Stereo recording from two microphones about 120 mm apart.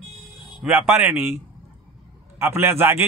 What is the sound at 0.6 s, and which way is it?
Speech, 15° right (ahead or behind).